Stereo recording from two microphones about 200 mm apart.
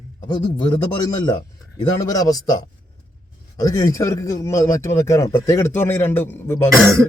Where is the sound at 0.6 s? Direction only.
20° left (ahead or behind).